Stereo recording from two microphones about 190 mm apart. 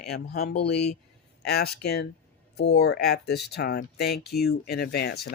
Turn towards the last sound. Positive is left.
turn(degrees=60)  # may be behind; listen again after turning